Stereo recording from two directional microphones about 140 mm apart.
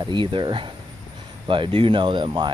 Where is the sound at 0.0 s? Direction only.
35° right (ahead or behind).